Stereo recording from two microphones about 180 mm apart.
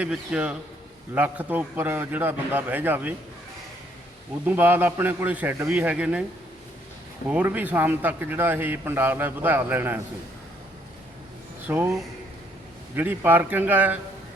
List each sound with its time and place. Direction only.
0.0 s a man's voice: 5° right (ahead or behind)
4.4 s a man's voice: 10° right (ahead or behind)
7.3 s a man's voice: 10° right (ahead or behind)
11.7 s a man's voice: 10° right (ahead or behind)
13.0 s a man's voice: 10° right (ahead or behind)